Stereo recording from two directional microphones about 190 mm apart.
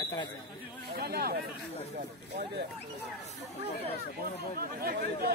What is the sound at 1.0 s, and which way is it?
Speech, 55° right (ahead or behind).